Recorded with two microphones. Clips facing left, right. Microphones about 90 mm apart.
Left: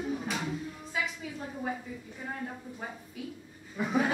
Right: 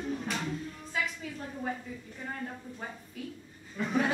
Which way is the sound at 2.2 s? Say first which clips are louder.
Left 1 dB; 5° left (ahead or behind).